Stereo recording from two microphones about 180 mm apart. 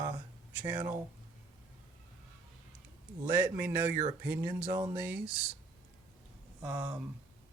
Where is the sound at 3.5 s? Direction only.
15° right (ahead or behind).